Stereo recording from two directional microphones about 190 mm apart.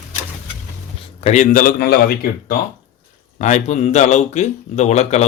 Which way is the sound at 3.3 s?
40° left (ahead or behind).